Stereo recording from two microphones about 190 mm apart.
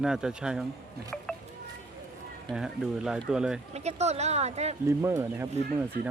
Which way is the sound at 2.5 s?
5° right (ahead or behind).